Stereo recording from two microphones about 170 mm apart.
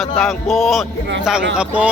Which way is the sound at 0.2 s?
Centre (ahead or behind).